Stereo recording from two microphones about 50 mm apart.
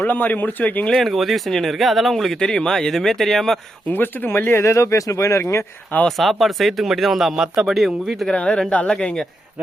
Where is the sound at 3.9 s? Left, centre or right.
Left.